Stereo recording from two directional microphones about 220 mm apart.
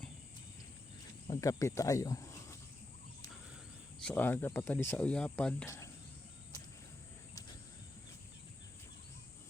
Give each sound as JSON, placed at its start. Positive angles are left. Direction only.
{"t": 1.3, "sound": "speech", "side_deg": 15}
{"t": 4.0, "sound": "speech", "side_deg": 10}